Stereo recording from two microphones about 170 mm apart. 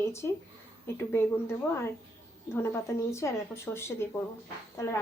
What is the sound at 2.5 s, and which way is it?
Speech, 15° left (ahead or behind).